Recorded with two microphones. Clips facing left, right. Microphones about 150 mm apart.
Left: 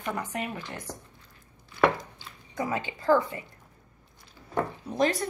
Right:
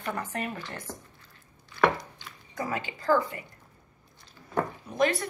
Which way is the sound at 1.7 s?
15° left (ahead or behind).